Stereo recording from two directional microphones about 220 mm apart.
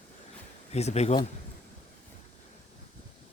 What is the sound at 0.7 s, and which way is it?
Speech, 30° left (ahead or behind).